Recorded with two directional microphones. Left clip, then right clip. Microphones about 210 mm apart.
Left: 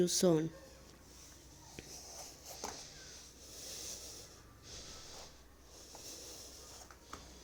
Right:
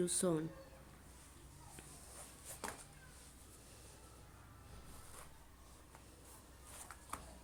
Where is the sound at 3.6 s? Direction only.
35° left (ahead or behind).